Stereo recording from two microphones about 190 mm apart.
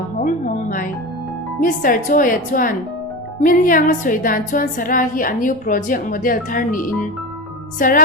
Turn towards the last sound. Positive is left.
turn(degrees=45)  # may be behind; listen again after turning